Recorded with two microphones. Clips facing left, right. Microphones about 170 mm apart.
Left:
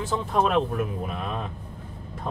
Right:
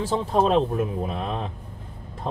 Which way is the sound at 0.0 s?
30° right (ahead or behind).